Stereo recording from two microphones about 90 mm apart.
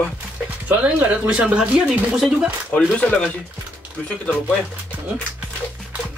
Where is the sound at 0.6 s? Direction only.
15° right (ahead or behind).